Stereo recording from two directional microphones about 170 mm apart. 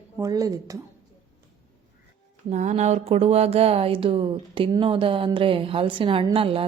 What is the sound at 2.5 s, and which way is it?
A woman's voice, 45° right (ahead or behind).